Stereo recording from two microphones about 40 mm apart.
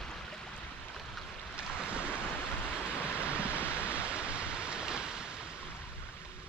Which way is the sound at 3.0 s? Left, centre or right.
Right.